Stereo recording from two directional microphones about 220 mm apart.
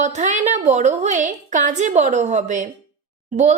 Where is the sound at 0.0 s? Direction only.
35° right (ahead or behind).